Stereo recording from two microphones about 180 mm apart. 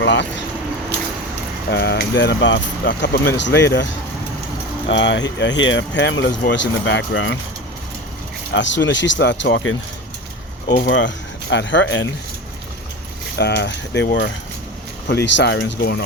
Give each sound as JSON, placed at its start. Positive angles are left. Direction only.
{"t": 0.0, "sound": "speech", "side_deg": 80}
{"t": 1.7, "sound": "speech", "side_deg": 75}
{"t": 4.9, "sound": "speech", "side_deg": 90}
{"t": 8.5, "sound": "speech", "side_deg": 90}
{"t": 10.8, "sound": "speech", "side_deg": 85}
{"t": 13.4, "sound": "speech", "side_deg": 70}